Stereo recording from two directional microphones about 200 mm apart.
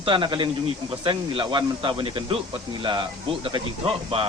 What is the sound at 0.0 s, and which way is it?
A man's voice, 25° right (ahead or behind).